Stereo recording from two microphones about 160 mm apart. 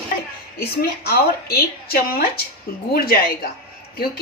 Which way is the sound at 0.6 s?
75° left (ahead or behind).